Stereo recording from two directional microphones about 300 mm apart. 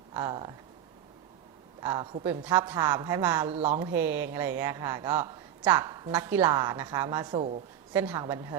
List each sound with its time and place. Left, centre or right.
0.1 s speech: centre
1.8 s speech: centre
3.5 s speech: right
3.8 s speech: centre
7.9 s speech: centre